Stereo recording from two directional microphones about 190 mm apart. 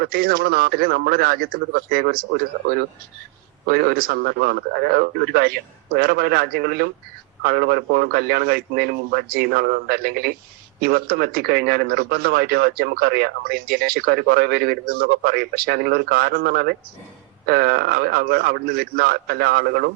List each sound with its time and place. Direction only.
0.0 s a man's voice: 50° right (ahead or behind)